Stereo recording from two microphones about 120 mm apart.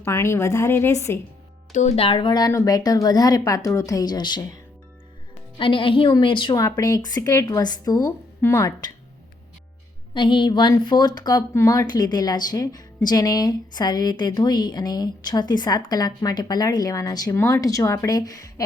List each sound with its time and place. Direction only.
0.0 s speech: 20° left (ahead or behind)
2.0 s a woman's voice: 45° left (ahead or behind)
6.6 s speech: 30° left (ahead or behind)
10.2 s speech: 40° left (ahead or behind)